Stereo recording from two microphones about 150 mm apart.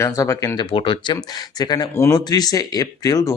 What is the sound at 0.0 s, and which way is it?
Speech, 20° left (ahead or behind).